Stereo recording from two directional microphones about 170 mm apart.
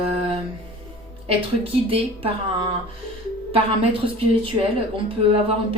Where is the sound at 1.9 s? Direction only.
30° right (ahead or behind).